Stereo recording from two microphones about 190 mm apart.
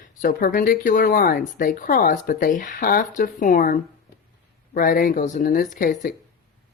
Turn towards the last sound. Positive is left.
turn(degrees=45)  # may be behind; listen again after turning